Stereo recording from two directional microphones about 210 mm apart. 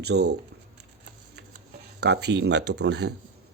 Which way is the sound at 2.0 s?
50° right (ahead or behind).